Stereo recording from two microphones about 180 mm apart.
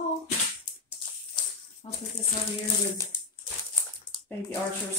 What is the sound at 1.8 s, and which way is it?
Speech, 30° left (ahead or behind).